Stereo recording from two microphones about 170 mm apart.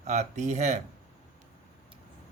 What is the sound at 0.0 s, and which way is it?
Speech, 40° right (ahead or behind).